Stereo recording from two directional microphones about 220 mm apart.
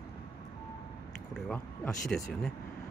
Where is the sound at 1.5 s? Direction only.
5° left (ahead or behind).